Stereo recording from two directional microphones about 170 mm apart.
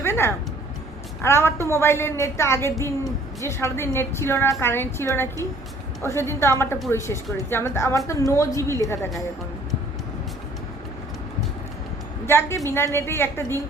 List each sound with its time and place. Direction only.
0.0 s a sound: 15° left (ahead or behind)
1.2 s a woman's voice: 15° left (ahead or behind)
12.2 s a woman's voice: 15° left (ahead or behind)